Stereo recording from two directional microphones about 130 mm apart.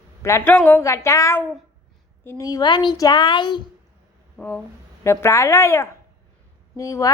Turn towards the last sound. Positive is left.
turn(degrees=25)  # may be behind; listen again after turning